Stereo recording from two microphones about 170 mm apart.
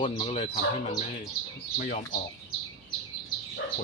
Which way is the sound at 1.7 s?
55° left (ahead or behind).